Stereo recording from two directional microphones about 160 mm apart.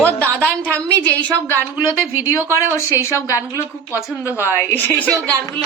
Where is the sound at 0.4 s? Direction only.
5° left (ahead or behind).